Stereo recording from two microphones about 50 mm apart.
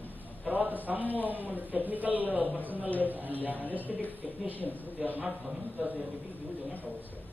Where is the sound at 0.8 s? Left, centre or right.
Right.